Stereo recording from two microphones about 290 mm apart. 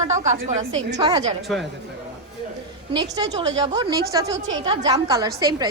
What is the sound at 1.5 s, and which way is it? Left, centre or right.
Speech, centre.